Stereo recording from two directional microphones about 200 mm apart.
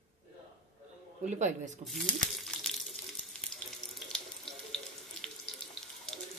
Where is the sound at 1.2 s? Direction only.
35° right (ahead or behind).